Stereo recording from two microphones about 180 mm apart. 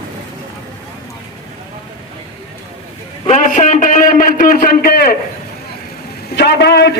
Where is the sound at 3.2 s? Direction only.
45° left (ahead or behind).